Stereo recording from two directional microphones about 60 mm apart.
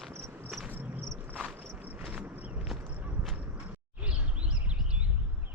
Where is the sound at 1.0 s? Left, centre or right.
Right.